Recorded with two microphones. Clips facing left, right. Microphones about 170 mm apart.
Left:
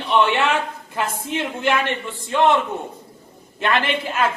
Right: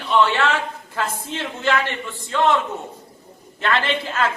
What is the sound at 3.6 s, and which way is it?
Speech, 15° left (ahead or behind).